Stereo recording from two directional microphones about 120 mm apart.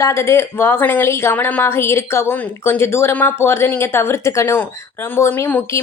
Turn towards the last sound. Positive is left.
turn(degrees=20)  # may be behind; listen again after turning